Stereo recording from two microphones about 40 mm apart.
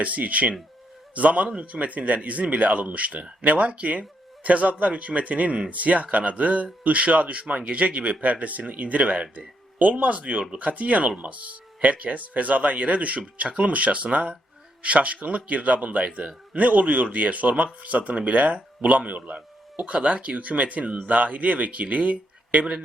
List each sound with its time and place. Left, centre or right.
0.0 s speech: right